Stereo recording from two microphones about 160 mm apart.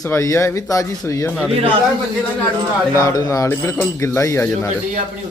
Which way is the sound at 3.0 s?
20° left (ahead or behind).